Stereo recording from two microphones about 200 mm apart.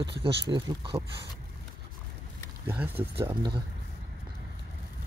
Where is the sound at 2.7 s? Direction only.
10° right (ahead or behind).